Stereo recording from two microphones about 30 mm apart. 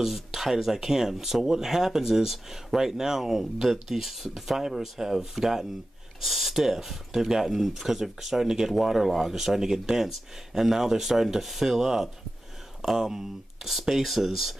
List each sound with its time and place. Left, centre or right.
0.0 s speech: centre